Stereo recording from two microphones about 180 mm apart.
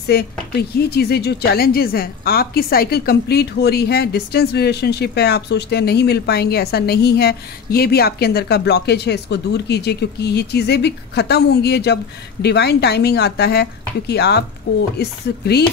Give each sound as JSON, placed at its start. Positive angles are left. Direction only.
{"t": 0.0, "sound": "speech", "side_deg": 60}